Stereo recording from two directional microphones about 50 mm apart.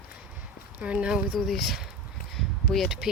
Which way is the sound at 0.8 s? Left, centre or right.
Right.